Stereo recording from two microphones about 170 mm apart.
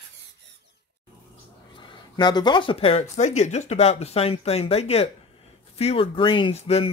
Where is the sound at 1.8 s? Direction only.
25° left (ahead or behind).